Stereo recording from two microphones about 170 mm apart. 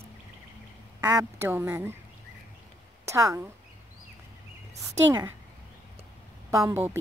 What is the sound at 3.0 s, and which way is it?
Speech, 15° right (ahead or behind).